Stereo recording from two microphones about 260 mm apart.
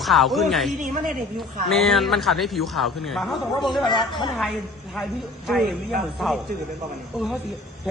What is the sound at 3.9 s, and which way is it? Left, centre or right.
Speech, centre.